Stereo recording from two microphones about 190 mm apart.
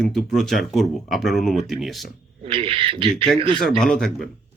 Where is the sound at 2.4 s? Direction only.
30° right (ahead or behind).